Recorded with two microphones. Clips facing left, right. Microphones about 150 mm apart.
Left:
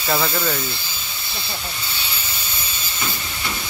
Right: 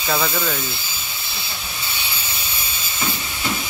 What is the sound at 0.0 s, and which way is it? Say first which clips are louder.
Speech: even; 5° left (ahead or behind).